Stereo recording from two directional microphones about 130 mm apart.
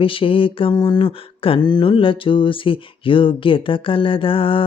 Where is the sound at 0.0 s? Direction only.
45° left (ahead or behind).